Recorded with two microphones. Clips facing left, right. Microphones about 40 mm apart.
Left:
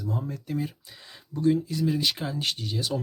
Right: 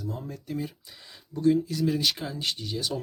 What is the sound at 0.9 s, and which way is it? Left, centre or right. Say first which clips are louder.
Speech: left 2 dB; centre.